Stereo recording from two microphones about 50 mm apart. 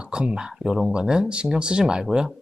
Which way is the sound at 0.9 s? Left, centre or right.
Centre.